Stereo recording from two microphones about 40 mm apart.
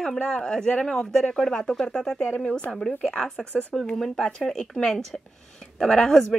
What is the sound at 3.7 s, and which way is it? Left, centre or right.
Speech, centre.